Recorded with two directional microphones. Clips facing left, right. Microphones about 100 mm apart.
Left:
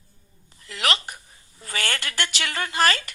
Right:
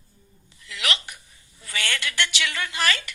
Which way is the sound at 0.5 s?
40° left (ahead or behind).